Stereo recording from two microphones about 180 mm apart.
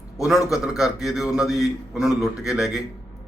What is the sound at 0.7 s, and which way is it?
A man's voice, centre (ahead or behind).